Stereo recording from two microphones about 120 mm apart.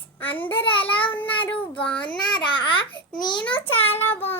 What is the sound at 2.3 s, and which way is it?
Babbling, 45° left (ahead or behind).